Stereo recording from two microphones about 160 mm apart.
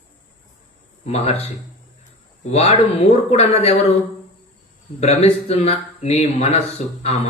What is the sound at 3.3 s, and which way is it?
Speech, 40° left (ahead or behind).